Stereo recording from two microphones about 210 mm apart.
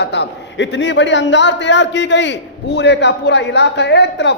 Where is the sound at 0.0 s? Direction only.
55° left (ahead or behind).